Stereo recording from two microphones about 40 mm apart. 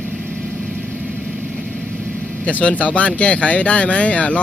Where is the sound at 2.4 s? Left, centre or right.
Left.